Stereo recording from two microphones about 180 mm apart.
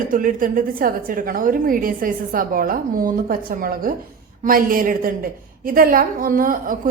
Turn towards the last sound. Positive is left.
turn(degrees=-50)  # may be behind; listen again after turning